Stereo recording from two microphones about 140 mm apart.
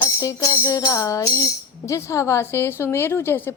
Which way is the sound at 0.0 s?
20° left (ahead or behind).